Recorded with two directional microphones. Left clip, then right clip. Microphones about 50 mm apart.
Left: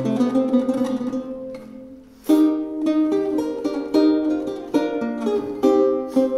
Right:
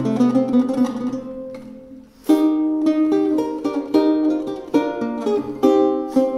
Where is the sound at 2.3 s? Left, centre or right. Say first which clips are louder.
Right 1 dB; centre.